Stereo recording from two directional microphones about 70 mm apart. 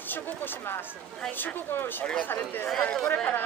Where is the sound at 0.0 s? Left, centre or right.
Left.